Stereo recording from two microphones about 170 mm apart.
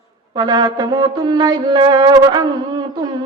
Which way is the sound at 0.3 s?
25° right (ahead or behind).